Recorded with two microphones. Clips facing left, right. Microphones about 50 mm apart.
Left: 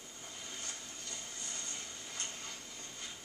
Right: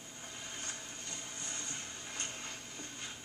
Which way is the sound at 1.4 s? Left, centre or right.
Right.